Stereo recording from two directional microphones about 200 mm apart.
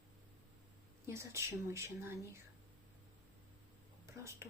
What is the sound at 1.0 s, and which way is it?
Speech, 15° right (ahead or behind).